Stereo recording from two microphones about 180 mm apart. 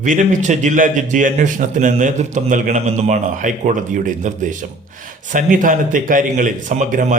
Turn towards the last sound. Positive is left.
turn(degrees=-45)  # may be behind; listen again after turning